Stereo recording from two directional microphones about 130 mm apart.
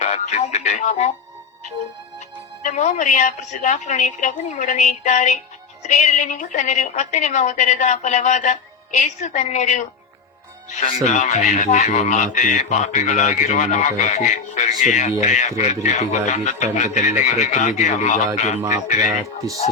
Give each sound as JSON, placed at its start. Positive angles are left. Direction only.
{"t": 0.0, "sound": "music", "side_deg": 65}
{"t": 2.6, "sound": "a woman's voice", "side_deg": 70}